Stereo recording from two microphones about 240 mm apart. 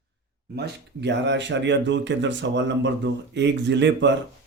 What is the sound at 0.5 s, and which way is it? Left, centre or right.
Speech, right.